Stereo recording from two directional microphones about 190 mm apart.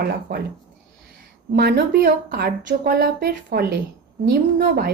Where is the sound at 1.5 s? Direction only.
60° right (ahead or behind).